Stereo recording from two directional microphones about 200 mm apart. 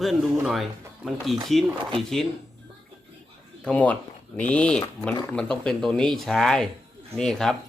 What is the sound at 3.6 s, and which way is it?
Speech, 5° left (ahead or behind).